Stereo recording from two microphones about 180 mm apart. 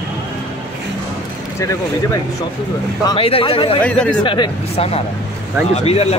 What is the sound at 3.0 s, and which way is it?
A man's voice, 30° left (ahead or behind).